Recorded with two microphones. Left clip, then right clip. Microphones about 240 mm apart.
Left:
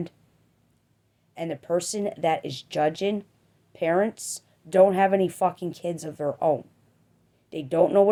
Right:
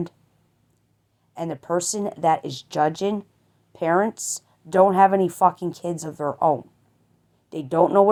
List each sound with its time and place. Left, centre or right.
1.3 s a woman's voice: centre